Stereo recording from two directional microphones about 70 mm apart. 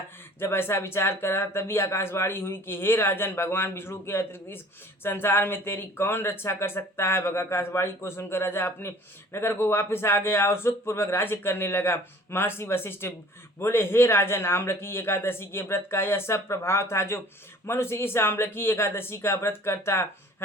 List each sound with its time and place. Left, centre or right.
0.3 s speech: left